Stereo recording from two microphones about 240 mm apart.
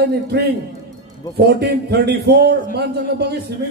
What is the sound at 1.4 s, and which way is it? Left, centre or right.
Speech, right.